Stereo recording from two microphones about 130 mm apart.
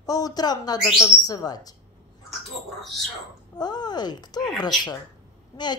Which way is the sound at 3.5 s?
30° left (ahead or behind).